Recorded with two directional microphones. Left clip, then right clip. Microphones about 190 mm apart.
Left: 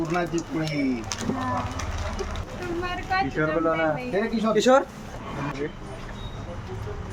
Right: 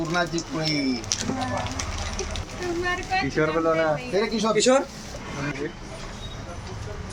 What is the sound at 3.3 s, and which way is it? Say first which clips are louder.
Speech: right 2 dB; 60° right (ahead or behind).